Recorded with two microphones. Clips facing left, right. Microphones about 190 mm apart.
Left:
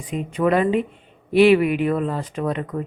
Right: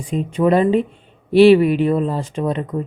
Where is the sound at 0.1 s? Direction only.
30° right (ahead or behind).